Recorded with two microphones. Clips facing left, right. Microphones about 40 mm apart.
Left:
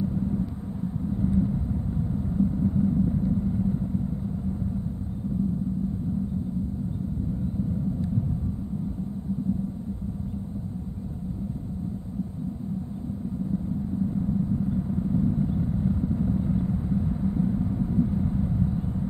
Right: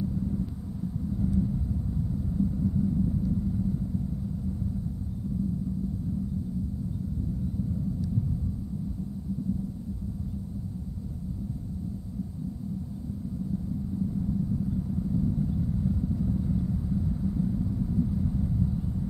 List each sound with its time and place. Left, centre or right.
0.0 s vehicle: left
14.0 s vehicle: left